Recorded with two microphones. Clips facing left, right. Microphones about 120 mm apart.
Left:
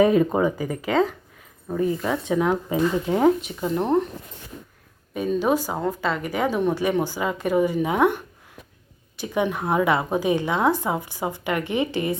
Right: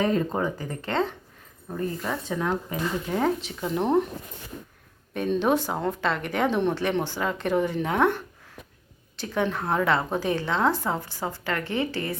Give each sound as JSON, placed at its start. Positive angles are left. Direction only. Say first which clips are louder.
{"t": 0.0, "sound": "speech", "louder": "left 7 dB", "side_deg": 15}
{"t": 3.2, "sound": "speech", "louder": "left 7 dB", "side_deg": 5}
{"t": 5.1, "sound": "speech", "louder": "left 1 dB", "side_deg": 5}